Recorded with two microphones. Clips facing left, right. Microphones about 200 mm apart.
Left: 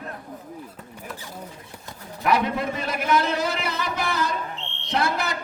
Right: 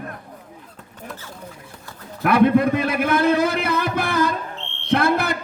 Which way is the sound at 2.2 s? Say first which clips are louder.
Right 8 dB; 55° right (ahead or behind).